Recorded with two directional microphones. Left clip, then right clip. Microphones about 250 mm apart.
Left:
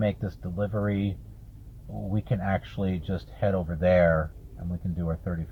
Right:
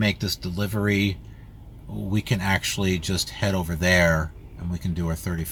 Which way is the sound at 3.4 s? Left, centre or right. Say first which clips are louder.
Left 2 dB; centre.